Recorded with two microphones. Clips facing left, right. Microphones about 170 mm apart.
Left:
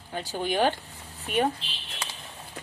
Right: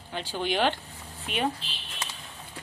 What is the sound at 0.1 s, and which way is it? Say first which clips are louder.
Speech: left 1 dB; 40° left (ahead or behind).